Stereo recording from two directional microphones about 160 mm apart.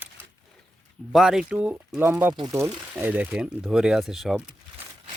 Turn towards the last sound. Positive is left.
turn(degrees=0)  # may be behind; listen again after turning